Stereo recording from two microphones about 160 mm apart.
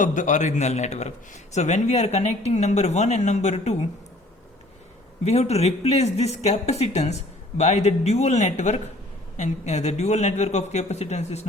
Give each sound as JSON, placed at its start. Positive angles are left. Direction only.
{"t": 0.0, "sound": "a man's voice", "side_deg": 55}
{"t": 5.2, "sound": "a man's voice", "side_deg": 40}